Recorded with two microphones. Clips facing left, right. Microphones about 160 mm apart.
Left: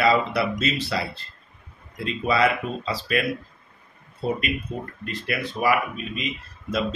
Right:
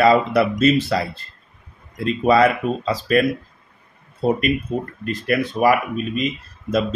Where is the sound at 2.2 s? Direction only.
45° right (ahead or behind).